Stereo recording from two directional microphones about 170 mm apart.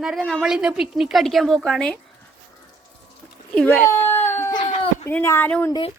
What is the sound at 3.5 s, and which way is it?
Baby cry, 5° left (ahead or behind).